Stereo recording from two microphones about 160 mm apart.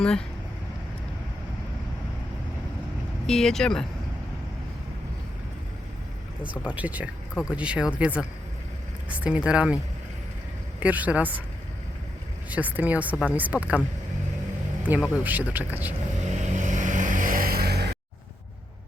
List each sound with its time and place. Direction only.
0.0 s speech: 5° left (ahead or behind)
3.2 s speech: 5° left (ahead or behind)
6.4 s speech: 10° right (ahead or behind)
12.5 s speech: 10° right (ahead or behind)
14.8 s speech: 10° right (ahead or behind)
16.3 s vehicle: 50° right (ahead or behind); by 17.8 s 80° right